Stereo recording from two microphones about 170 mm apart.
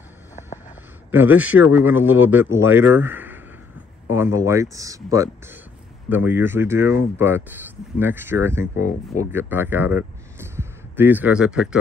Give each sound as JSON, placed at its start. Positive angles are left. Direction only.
{"t": 1.1, "sound": "speech", "side_deg": -10}